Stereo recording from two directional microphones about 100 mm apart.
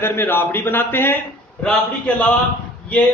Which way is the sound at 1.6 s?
10° left (ahead or behind).